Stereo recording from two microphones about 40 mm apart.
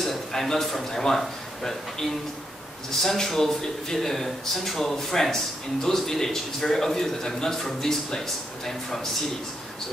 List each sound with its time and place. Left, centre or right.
0.0 s a man's voice: centre